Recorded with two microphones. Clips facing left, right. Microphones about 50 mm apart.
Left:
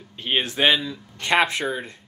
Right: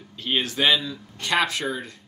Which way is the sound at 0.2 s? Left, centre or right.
Left.